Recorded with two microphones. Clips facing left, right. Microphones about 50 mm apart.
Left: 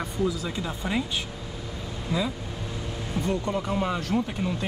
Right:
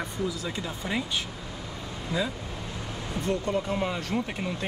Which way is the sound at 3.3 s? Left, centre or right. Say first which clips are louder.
Right 1 dB; left.